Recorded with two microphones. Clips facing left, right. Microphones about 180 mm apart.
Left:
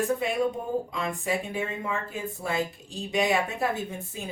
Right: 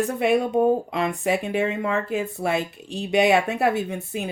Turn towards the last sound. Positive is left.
turn(degrees=-70)  # may be behind; listen again after turning